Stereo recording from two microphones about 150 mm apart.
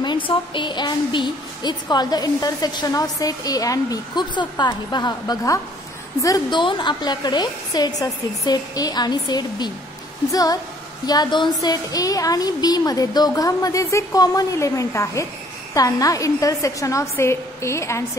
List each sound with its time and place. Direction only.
0.0 s a woman's voice: 30° left (ahead or behind)